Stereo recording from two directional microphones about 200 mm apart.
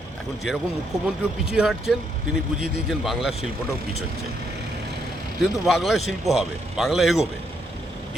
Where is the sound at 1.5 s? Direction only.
Centre (ahead or behind).